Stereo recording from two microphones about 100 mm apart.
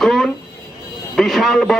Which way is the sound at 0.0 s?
5° left (ahead or behind).